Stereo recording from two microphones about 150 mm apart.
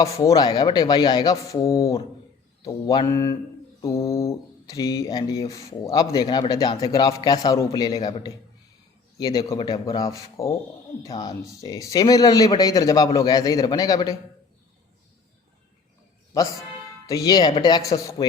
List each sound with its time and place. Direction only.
0.0 s a man's voice: 25° left (ahead or behind)
16.3 s a man's voice: 25° left (ahead or behind)